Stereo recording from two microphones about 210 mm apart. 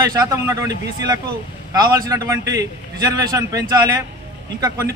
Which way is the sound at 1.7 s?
15° right (ahead or behind).